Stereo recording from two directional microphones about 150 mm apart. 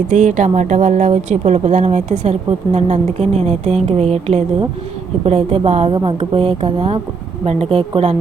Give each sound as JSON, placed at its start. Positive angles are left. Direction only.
{"t": 0.1, "sound": "a woman's voice", "side_deg": -55}